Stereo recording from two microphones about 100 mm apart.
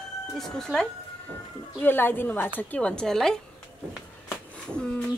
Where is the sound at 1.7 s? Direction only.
20° left (ahead or behind); by 3.4 s 5° left (ahead or behind).